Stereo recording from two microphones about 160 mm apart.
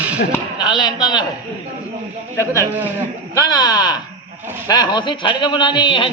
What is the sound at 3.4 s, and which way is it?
Speech, 25° left (ahead or behind).